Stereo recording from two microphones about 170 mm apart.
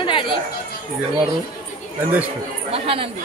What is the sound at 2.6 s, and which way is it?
Speech, 35° right (ahead or behind).